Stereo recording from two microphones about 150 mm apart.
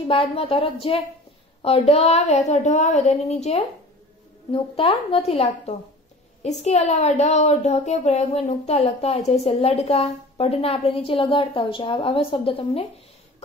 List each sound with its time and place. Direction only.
0.1 s a woman's voice: 40° left (ahead or behind)